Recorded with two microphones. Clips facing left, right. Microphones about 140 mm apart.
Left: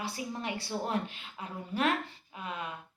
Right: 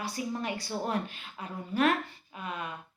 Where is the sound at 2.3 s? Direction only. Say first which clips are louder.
Right 1 dB; 25° left (ahead or behind).